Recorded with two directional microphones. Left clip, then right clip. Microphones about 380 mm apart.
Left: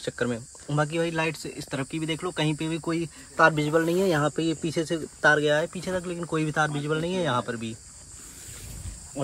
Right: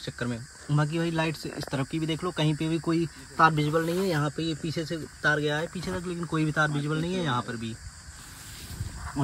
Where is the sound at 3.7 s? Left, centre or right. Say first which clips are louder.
Left 4 dB; left.